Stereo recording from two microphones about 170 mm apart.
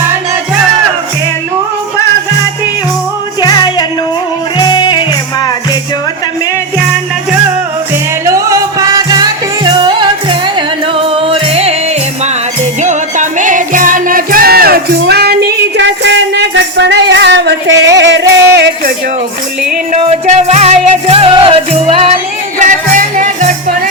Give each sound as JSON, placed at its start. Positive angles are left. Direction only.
{"t": 3.4, "sound": "music", "side_deg": 25}
{"t": 8.2, "sound": "music", "side_deg": -20}
{"t": 12.8, "sound": "music", "side_deg": -45}
{"t": 19.9, "sound": "music", "side_deg": -45}
{"t": 22.5, "sound": "music", "side_deg": -50}